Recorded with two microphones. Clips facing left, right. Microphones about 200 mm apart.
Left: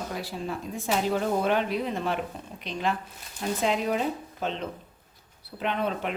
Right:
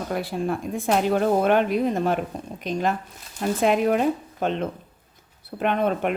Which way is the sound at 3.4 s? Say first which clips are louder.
Right 6 dB; 55° right (ahead or behind).